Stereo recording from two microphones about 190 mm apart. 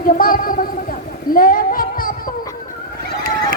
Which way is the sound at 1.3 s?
50° left (ahead or behind).